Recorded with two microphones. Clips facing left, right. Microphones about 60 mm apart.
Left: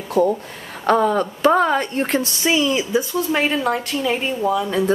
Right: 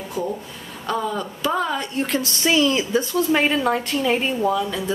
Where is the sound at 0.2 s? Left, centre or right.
Left.